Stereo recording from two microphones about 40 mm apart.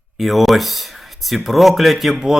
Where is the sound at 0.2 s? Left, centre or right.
Centre.